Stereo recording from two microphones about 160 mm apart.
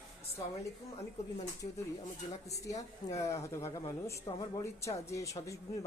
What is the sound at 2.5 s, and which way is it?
Speech, 20° left (ahead or behind).